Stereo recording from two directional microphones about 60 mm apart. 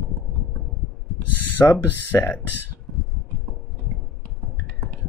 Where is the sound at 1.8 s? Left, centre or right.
Left.